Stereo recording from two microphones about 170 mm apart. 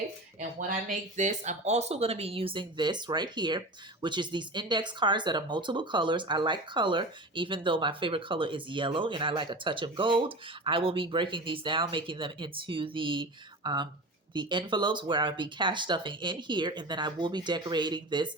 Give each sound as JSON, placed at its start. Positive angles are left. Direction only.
{"t": 0.9, "sound": "speech", "side_deg": -45}